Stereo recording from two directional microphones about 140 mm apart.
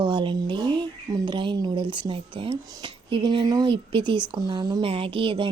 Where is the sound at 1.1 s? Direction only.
35° right (ahead or behind).